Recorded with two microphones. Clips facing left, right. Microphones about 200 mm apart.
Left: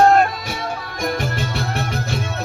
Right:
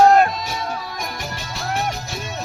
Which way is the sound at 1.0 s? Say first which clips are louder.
Left 8 dB; 55° left (ahead or behind).